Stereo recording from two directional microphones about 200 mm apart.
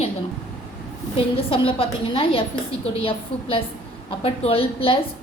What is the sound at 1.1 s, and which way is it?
A woman's voice, 25° left (ahead or behind).